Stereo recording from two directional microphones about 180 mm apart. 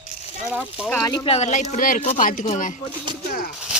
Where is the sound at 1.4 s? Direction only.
40° left (ahead or behind).